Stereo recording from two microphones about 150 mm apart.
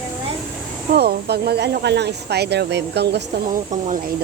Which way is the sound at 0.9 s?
90° right.